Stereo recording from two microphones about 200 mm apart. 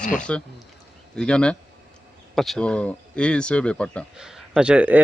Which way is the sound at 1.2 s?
5° left (ahead or behind).